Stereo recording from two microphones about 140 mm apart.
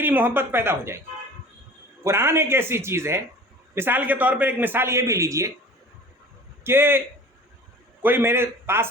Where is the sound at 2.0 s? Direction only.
20° right (ahead or behind).